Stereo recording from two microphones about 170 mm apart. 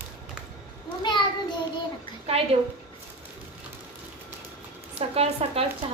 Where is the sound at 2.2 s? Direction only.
35° right (ahead or behind).